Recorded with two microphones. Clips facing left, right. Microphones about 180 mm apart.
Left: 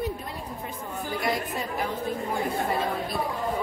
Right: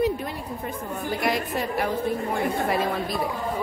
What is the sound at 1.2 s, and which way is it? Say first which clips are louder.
Speech: right 3 dB; 75° right (ahead or behind).